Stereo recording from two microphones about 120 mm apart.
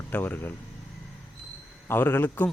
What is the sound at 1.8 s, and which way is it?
Speech, 15° left (ahead or behind).